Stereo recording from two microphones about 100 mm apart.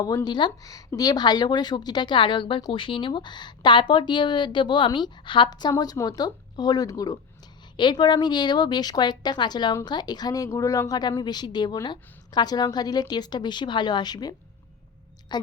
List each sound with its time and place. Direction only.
0.3 s a woman's voice: 50° left (ahead or behind)
7.8 s a woman's voice: 50° left (ahead or behind)